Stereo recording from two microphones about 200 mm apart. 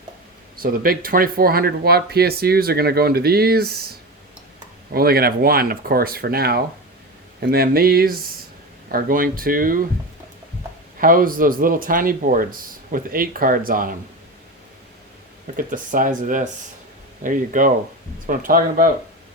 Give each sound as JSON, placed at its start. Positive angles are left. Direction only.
{"t": 0.6, "sound": "speech", "side_deg": -45}
{"t": 4.9, "sound": "speech", "side_deg": -50}
{"t": 11.0, "sound": "speech", "side_deg": -45}
{"t": 15.5, "sound": "speech", "side_deg": -40}